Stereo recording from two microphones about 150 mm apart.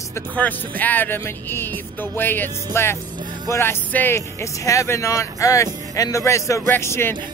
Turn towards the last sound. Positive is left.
turn(degrees=15)  # may be behind; listen again after turning